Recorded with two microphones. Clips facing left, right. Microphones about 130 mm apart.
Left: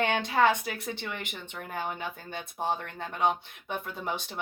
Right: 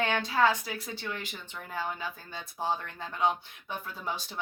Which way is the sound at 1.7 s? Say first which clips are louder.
Left 1 dB; 20° left (ahead or behind).